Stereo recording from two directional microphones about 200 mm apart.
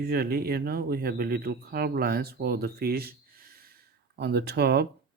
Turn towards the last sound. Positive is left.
turn(degrees=-55)  # may be behind; listen again after turning